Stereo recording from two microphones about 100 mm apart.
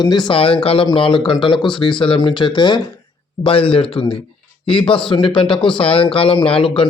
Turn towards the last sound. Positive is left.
turn(degrees=65)  # may be behind; listen again after turning